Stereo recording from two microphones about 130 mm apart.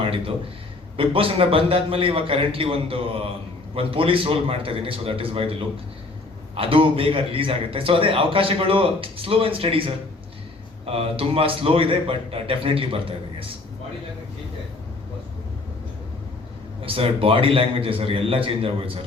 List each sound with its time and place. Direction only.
0.0 s a man's voice: 45° right (ahead or behind)
16.8 s a man's voice: 45° right (ahead or behind)